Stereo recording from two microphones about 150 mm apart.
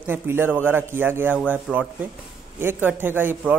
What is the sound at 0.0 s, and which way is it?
Speech, 15° right (ahead or behind).